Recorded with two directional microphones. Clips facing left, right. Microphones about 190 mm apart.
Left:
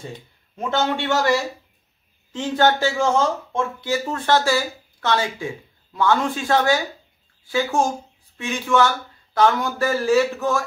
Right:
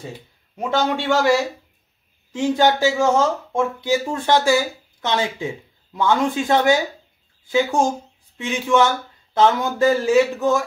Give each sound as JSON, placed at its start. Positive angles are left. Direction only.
{"t": 0.6, "sound": "speech", "side_deg": -15}
{"t": 2.3, "sound": "speech", "side_deg": -15}